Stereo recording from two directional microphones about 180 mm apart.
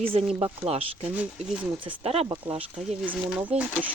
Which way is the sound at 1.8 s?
30° right (ahead or behind).